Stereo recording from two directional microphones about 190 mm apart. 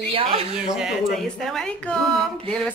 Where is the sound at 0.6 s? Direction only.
5° right (ahead or behind).